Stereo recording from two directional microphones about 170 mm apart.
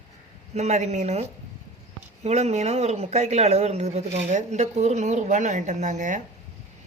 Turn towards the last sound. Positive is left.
turn(degrees=-45)  # may be behind; listen again after turning